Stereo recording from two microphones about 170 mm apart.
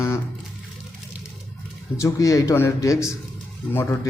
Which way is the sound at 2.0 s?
20° left (ahead or behind).